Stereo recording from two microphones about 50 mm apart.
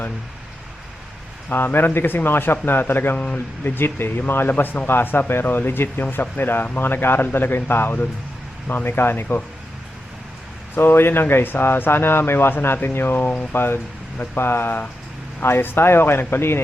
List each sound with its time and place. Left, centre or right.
1.5 s speech: left
10.8 s speech: left